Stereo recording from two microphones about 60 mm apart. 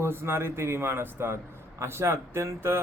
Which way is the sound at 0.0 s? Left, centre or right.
Right.